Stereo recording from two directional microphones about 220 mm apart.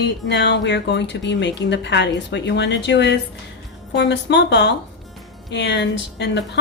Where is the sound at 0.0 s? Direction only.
50° left (ahead or behind).